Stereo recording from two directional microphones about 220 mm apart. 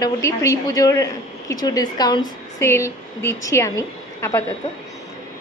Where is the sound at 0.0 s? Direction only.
15° left (ahead or behind).